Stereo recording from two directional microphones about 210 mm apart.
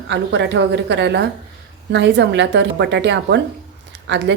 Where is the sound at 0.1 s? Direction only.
55° right (ahead or behind).